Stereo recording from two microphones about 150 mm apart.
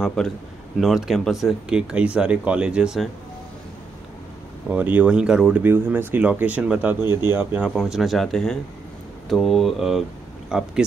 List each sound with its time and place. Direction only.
0.0 s speech: 5° left (ahead or behind)
4.6 s speech: 10° right (ahead or behind)